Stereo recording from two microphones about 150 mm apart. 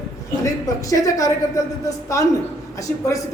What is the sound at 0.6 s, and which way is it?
Speech, 20° left (ahead or behind).